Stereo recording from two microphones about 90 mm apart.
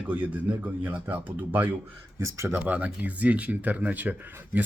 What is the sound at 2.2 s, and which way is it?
Speech, 30° right (ahead or behind).